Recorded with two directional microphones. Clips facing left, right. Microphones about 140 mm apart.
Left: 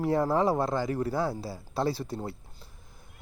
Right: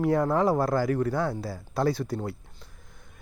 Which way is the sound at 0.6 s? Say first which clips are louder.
Right 4 dB; 20° left (ahead or behind).